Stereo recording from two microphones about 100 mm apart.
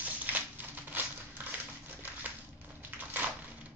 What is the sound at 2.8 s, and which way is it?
Crushing, 20° right (ahead or behind).